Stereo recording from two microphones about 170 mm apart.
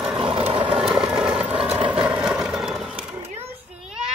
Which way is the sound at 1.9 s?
10° right (ahead or behind).